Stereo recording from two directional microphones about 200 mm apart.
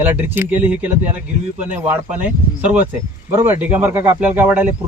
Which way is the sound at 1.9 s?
10° right (ahead or behind).